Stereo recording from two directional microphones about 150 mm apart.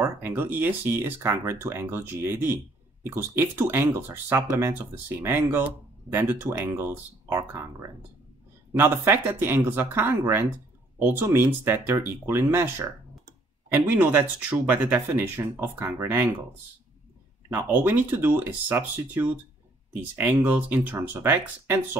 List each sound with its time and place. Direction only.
0.0 s speech: 15° right (ahead or behind)
8.7 s speech: 15° right (ahead or behind)
17.5 s speech: 15° right (ahead or behind)